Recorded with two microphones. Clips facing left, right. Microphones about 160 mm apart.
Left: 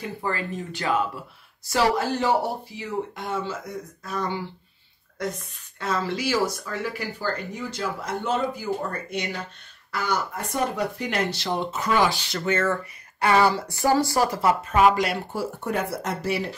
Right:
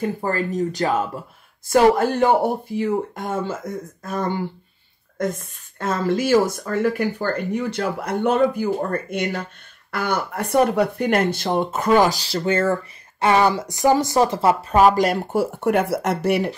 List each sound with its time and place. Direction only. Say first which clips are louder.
0.0 s speech: right 6 dB; 45° right (ahead or behind)
1.7 s a woman's voice: right 7 dB; 55° right (ahead or behind); by 12.7 s 30° right (ahead or behind)
13.2 s speech: right 3 dB; 20° right (ahead or behind); by 15.2 s 40° right (ahead or behind)
15.3 s speech: right 8 dB; 65° right (ahead or behind)